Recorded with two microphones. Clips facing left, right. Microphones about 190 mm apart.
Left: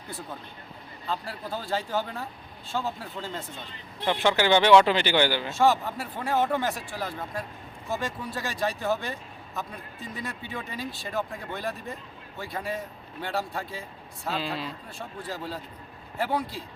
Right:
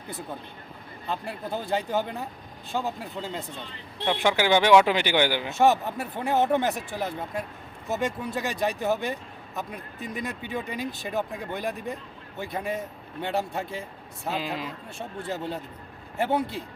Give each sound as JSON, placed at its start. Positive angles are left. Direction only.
{"t": 1.0, "sound": "speech", "side_deg": -20}